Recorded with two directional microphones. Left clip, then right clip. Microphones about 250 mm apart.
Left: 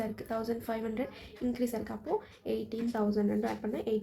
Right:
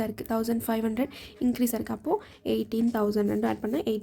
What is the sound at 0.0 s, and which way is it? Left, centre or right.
A woman's voice, right.